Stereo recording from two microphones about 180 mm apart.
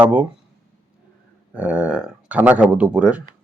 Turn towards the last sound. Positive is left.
turn(degrees=-5)  # may be behind; listen again after turning